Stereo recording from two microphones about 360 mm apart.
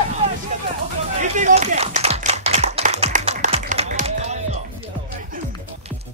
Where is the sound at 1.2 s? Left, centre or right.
Centre.